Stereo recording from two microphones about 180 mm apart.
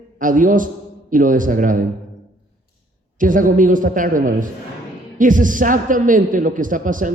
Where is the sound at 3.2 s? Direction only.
45° right (ahead or behind).